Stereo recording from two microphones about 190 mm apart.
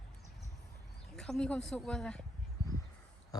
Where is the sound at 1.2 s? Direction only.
5° left (ahead or behind).